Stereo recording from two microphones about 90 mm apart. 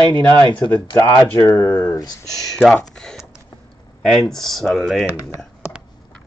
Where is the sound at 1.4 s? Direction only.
35° left (ahead or behind).